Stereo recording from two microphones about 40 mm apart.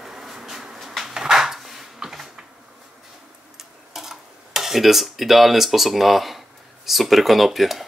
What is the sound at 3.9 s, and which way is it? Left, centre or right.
Dishes, centre.